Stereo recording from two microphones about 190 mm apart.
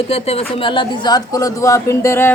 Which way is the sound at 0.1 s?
30° left (ahead or behind).